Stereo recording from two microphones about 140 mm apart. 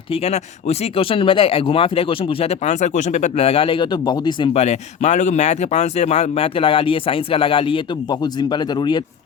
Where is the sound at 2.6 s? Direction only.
60° left (ahead or behind); by 4.6 s 35° left (ahead or behind).